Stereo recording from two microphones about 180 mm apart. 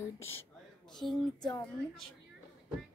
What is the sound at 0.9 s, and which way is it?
Speech, centre (ahead or behind).